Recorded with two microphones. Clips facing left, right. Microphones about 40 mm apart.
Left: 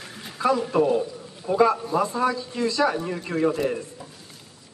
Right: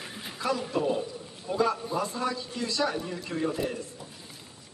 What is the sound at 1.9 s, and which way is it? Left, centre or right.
A man's voice, centre.